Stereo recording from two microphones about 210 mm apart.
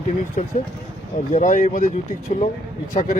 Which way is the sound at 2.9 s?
40° left (ahead or behind).